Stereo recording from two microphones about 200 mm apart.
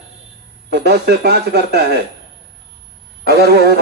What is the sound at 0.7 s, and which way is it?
Speech, 55° right (ahead or behind).